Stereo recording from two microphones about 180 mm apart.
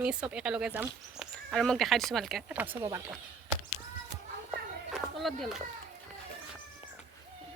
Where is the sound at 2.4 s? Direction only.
10° right (ahead or behind).